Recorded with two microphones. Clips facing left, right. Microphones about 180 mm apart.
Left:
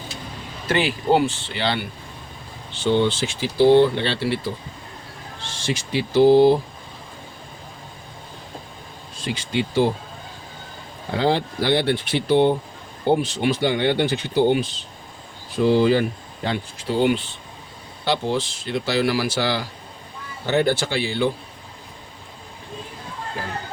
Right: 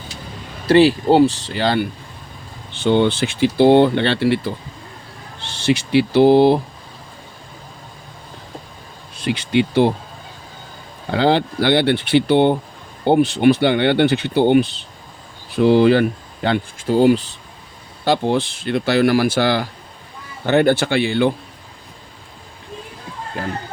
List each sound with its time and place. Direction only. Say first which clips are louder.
0.7 s speech: right 7 dB; 35° right (ahead or behind)
2.7 s speech: right 4 dB; 60° right (ahead or behind)
5.4 s speech: right 8 dB; 65° right (ahead or behind)
9.1 s speech: right 7 dB; 65° right (ahead or behind)
11.1 s speech: right 4 dB; 70° right (ahead or behind)
16.9 s speech: right 6 dB; 40° right (ahead or behind)
18.0 s speech: right 5 dB; 55° right (ahead or behind)